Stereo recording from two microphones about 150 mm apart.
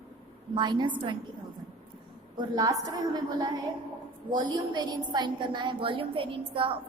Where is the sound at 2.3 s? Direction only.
25° right (ahead or behind).